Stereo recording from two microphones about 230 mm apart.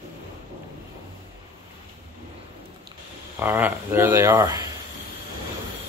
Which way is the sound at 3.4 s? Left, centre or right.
Centre.